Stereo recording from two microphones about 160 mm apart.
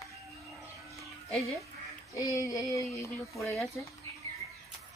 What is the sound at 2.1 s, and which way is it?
Child singing, 20° left (ahead or behind).